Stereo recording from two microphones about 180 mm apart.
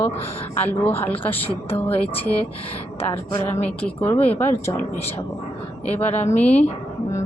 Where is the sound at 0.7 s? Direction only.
10° left (ahead or behind).